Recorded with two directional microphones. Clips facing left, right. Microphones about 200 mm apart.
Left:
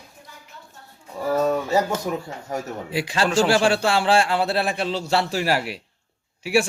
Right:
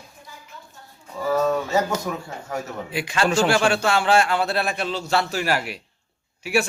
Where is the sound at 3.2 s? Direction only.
Centre (ahead or behind).